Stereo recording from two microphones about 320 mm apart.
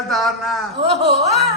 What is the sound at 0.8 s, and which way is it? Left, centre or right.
Speech, centre.